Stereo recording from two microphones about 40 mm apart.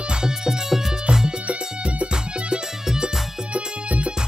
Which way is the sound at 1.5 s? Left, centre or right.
Right.